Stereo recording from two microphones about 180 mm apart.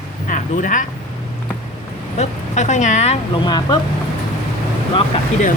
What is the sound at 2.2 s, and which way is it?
Speech, 40° left (ahead or behind).